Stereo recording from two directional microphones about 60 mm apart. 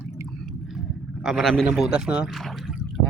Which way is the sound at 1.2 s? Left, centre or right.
Centre.